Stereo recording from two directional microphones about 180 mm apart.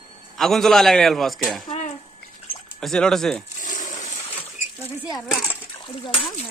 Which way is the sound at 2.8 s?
5° left (ahead or behind).